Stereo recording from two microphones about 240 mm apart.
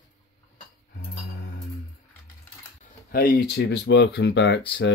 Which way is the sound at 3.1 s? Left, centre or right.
Left.